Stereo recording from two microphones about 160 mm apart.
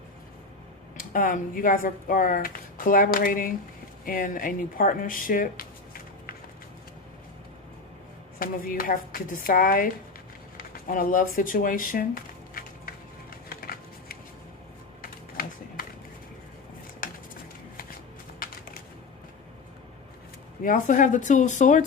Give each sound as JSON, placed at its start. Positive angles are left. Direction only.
{"t": 0.9, "sound": "speech", "side_deg": 55}
{"t": 8.4, "sound": "speech", "side_deg": 60}
{"t": 13.5, "sound": "a sound", "side_deg": 70}
{"t": 20.7, "sound": "speech", "side_deg": 55}